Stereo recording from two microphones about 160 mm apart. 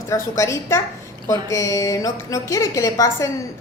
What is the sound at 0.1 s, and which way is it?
A woman's voice, 20° left (ahead or behind).